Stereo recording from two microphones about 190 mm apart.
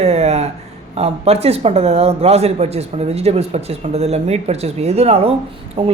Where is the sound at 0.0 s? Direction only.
35° right (ahead or behind).